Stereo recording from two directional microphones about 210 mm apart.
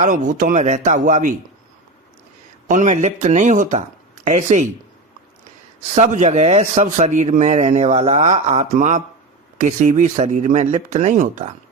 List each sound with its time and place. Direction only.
0.0 s a man's voice: 40° right (ahead or behind)
2.6 s a man's voice: 35° right (ahead or behind)
5.9 s a man's voice: 35° right (ahead or behind)